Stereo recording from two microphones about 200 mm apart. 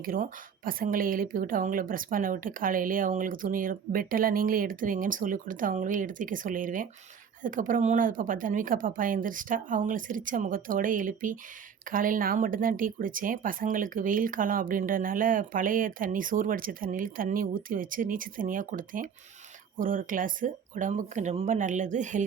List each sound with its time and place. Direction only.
0.0 s speech: 45° right (ahead or behind)